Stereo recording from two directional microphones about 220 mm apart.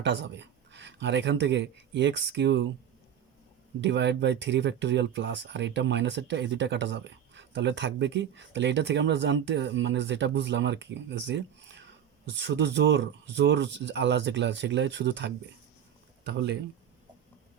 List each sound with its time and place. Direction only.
0.0 s speech: 55° right (ahead or behind)
3.8 s speech: 50° right (ahead or behind)